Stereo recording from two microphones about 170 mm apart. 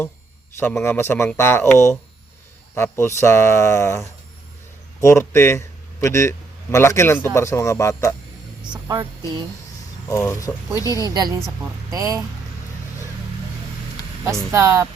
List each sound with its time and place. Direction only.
0.6 s a man's voice: 15° left (ahead or behind)
8.9 s speech: 20° right (ahead or behind)
10.1 s speech: 20° left (ahead or behind)
11.0 s speech: 20° right (ahead or behind)
14.5 s speech: 15° right (ahead or behind)